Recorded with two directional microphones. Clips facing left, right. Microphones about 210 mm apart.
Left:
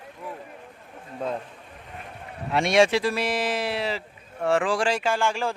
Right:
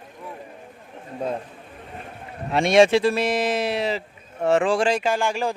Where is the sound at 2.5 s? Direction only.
25° right (ahead or behind).